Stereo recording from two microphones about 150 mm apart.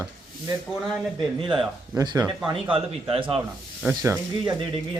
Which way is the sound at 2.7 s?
35° right (ahead or behind).